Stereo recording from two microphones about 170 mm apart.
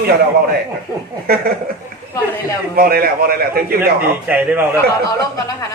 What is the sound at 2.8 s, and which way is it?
Speech, 60° right (ahead or behind).